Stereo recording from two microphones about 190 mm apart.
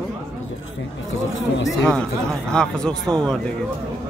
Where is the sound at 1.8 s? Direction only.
Centre (ahead or behind).